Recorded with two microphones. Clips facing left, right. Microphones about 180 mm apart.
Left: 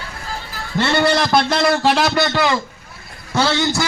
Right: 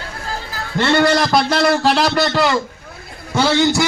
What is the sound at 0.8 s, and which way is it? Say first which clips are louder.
A man's voice: right 2 dB; centre (ahead or behind).